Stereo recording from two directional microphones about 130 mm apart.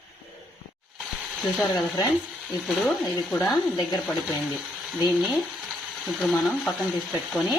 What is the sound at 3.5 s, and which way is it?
Speech, 35° left (ahead or behind).